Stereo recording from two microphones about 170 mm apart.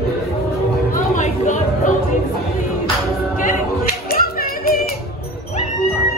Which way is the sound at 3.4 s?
55° left (ahead or behind).